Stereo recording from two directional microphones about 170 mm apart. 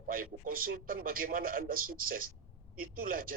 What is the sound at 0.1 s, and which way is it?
A man's voice, 55° right (ahead or behind).